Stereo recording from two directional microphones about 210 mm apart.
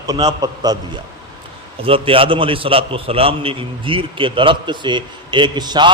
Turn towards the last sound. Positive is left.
turn(degrees=-20)  # may be behind; listen again after turning